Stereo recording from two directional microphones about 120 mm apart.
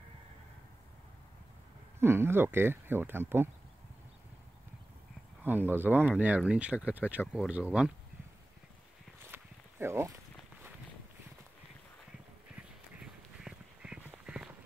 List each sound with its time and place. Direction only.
2.0 s speech: 20° right (ahead or behind)
5.4 s speech: 15° right (ahead or behind)
9.3 s a sound: 20° right (ahead or behind)
12.5 s duck: 5° right (ahead or behind)